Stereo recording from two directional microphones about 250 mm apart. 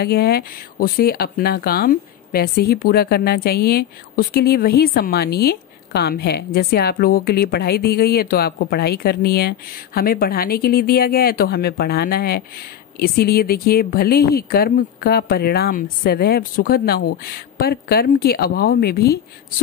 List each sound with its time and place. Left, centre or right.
0.0 s speech: left